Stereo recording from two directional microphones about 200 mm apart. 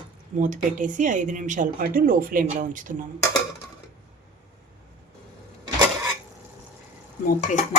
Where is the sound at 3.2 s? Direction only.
15° left (ahead or behind).